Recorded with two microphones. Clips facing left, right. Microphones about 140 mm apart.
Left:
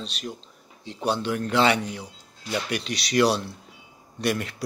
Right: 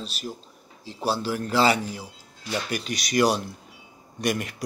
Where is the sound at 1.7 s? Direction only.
30° right (ahead or behind).